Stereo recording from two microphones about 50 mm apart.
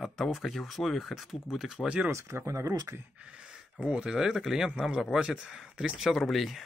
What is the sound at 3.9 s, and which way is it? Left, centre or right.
Speech, centre.